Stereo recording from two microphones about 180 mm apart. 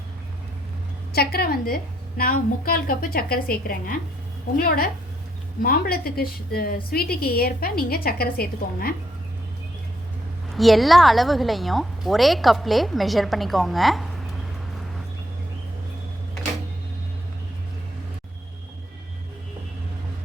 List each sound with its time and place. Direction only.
1.1 s a woman's voice: 60° left (ahead or behind)
10.5 s a woman's voice: centre (ahead or behind)